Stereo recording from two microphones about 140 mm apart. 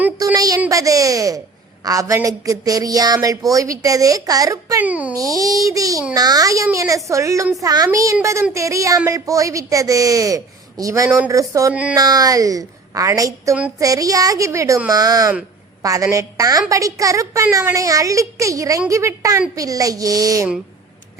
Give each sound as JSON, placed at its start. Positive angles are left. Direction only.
{"t": 0.3, "sound": "a sound", "side_deg": -25}
{"t": 0.7, "sound": "a woman's voice", "side_deg": -25}
{"t": 4.8, "sound": "a child's voice", "side_deg": -10}
{"t": 5.1, "sound": "a woman's voice", "side_deg": -25}
{"t": 11.7, "sound": "a child's voice", "side_deg": -10}
{"t": 11.9, "sound": "a woman's voice", "side_deg": -25}